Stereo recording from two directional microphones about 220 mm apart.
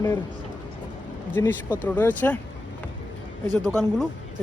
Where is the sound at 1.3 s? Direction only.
10° left (ahead or behind).